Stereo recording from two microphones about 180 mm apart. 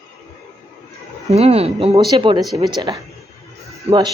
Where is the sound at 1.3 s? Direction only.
35° right (ahead or behind).